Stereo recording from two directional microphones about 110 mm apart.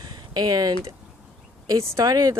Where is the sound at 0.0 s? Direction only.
40° right (ahead or behind).